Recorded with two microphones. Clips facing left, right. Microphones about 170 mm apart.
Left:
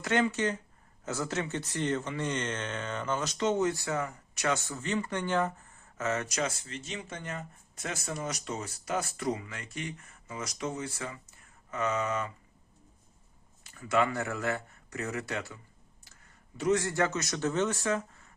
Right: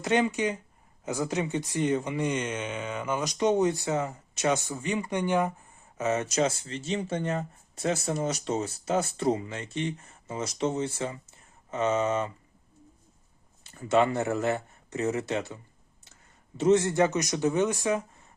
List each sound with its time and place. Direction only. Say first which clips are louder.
0.0 s speech: right 3 dB; 15° right (ahead or behind)
13.7 s speech: right 5 dB; 25° right (ahead or behind)